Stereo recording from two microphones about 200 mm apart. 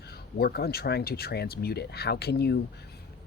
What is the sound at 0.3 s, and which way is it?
Speech, 50° left (ahead or behind).